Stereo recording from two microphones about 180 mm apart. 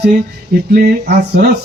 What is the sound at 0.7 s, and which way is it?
Speech, 60° right (ahead or behind).